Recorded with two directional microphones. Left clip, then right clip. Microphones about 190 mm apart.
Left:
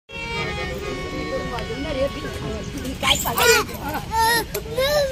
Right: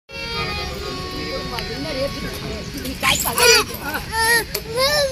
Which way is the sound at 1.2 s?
Centre (ahead or behind).